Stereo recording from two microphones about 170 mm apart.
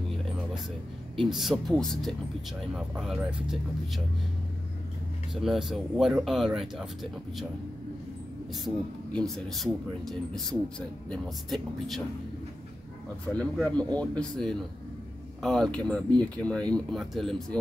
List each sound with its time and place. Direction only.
1.1 s speech: centre (ahead or behind)
5.3 s speech: centre (ahead or behind)
8.6 s speech: centre (ahead or behind)
13.4 s speech: 5° left (ahead or behind)